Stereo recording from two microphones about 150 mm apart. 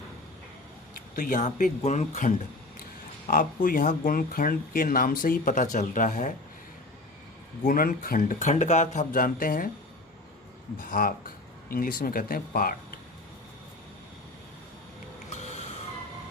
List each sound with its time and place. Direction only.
0.9 s speech: 65° left (ahead or behind)
3.2 s speech: 70° left (ahead or behind)
7.6 s speech: 65° left (ahead or behind)
10.8 s speech: 65° left (ahead or behind)
15.3 s snort: 50° left (ahead or behind)